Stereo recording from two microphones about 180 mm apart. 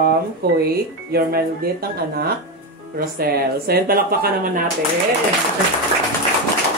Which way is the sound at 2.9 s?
55° right (ahead or behind).